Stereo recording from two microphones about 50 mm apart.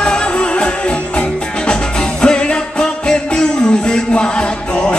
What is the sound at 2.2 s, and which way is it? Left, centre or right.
Music, centre.